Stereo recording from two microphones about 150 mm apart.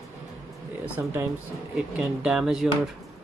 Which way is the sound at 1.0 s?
15° right (ahead or behind).